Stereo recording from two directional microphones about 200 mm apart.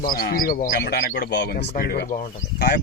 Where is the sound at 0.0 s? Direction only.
45° left (ahead or behind).